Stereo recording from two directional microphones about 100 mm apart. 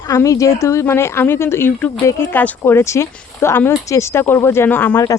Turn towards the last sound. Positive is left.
turn(degrees=20)  # may be behind; listen again after turning